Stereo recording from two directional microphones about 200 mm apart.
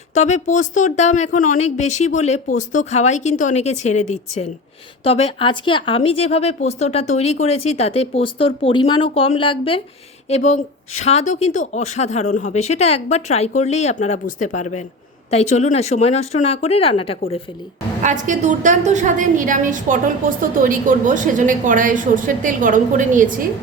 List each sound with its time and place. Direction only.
0.1 s speech: 35° left (ahead or behind)
18.0 s a woman's voice: 40° right (ahead or behind)